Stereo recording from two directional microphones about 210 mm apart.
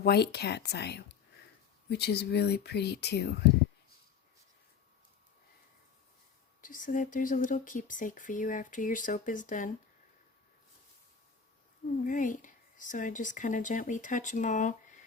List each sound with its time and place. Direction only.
0.0 s speech: 50° left (ahead or behind)
6.6 s speech: 40° left (ahead or behind)
12.0 s speech: 40° left (ahead or behind)